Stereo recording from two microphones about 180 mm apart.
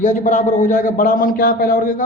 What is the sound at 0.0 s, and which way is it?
A man's voice, 45° left (ahead or behind).